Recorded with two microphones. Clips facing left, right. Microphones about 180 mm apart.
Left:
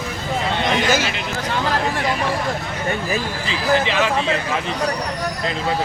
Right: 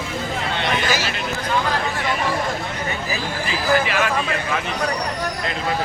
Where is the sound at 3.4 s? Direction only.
20° left (ahead or behind).